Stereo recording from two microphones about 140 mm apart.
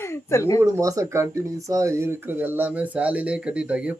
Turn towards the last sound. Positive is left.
turn(degrees=-10)  # may be behind; listen again after turning